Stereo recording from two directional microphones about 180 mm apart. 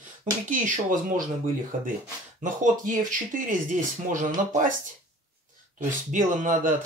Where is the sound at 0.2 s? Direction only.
50° right (ahead or behind).